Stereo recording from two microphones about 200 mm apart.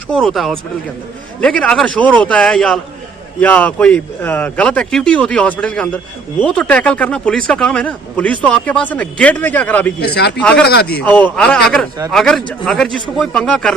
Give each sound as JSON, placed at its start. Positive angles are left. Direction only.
{"t": 0.1, "sound": "a man's voice", "side_deg": 0}
{"t": 10.0, "sound": "a man's voice", "side_deg": 55}
{"t": 11.0, "sound": "a man's voice", "side_deg": 10}